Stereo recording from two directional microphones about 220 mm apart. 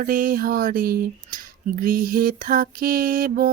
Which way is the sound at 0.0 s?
40° right (ahead or behind).